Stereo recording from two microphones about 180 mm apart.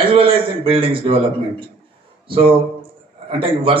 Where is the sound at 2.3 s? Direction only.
30° right (ahead or behind).